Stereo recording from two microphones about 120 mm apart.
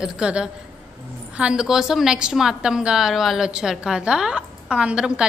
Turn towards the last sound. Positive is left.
turn(degrees=-5)  # may be behind; listen again after turning